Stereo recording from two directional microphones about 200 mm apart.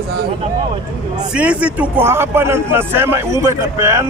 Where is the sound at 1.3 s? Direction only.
5° right (ahead or behind).